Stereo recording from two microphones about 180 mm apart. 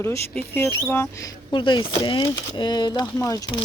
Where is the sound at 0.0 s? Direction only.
10° left (ahead or behind).